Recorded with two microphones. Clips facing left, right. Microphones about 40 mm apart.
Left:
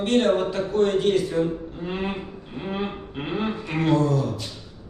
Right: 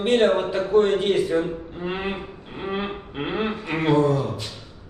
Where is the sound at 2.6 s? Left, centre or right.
Right.